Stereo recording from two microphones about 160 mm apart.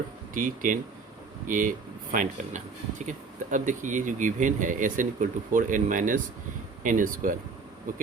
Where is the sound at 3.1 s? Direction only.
50° right (ahead or behind).